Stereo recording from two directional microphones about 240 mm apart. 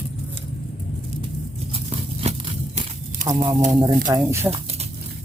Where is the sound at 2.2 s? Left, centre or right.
Right.